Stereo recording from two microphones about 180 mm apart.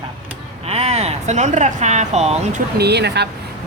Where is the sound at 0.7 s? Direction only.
35° right (ahead or behind).